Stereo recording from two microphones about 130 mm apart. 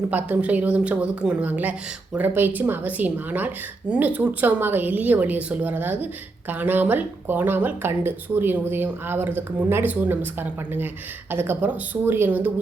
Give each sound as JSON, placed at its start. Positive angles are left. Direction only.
{"t": 0.1, "sound": "a woman's voice", "side_deg": -10}